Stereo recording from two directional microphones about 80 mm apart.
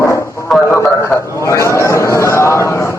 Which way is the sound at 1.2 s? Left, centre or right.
Left.